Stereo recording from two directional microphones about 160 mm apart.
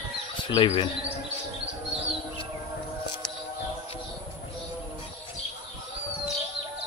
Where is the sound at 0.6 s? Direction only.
35° left (ahead or behind).